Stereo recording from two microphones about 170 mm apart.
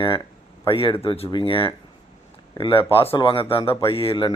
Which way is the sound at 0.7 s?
30° left (ahead or behind).